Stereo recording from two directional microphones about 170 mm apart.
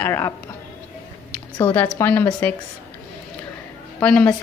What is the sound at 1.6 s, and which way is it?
Speech, 15° left (ahead or behind).